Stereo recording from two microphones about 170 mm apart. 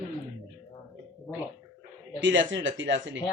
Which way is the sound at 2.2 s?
90° right.